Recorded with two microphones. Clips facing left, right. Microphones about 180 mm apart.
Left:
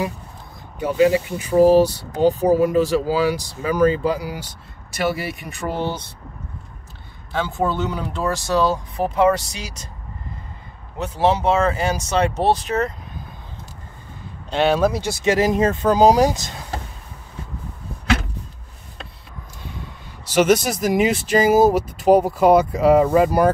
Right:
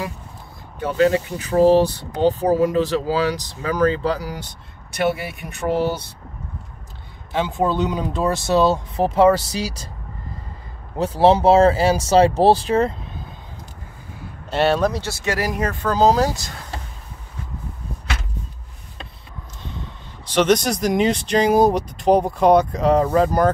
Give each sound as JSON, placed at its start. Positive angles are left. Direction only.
{"t": 0.7, "sound": "speech", "side_deg": 10}
{"t": 7.3, "sound": "speech", "side_deg": -20}
{"t": 11.0, "sound": "speech", "side_deg": -35}
{"t": 14.5, "sound": "speech", "side_deg": 0}
{"t": 14.9, "sound": "speech", "side_deg": 15}
{"t": 19.6, "sound": "speech", "side_deg": 10}